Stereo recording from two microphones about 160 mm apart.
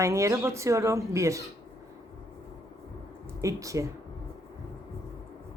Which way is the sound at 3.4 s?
20° right (ahead or behind).